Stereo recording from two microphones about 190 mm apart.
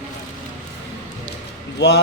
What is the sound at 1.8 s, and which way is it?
Speech, 65° left (ahead or behind).